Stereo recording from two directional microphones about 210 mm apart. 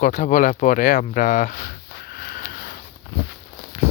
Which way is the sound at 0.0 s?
35° left (ahead or behind).